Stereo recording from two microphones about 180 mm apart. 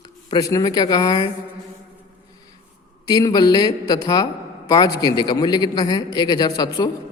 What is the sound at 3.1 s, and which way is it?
A man's voice, 20° left (ahead or behind).